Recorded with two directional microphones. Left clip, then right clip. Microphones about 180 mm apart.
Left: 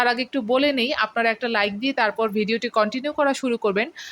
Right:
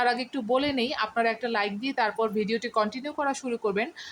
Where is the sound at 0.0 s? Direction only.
20° left (ahead or behind).